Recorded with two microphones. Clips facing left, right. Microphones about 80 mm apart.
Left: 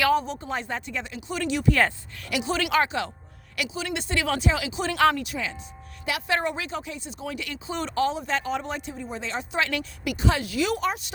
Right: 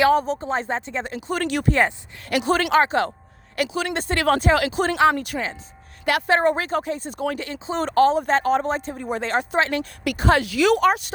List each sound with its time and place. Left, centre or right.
0.0 s speech: right
1.0 s speech: right
7.3 s speech: right
7.9 s speech: right
9.0 s speech: right
9.6 s speech: right
10.0 s speech: right
10.4 s speech: right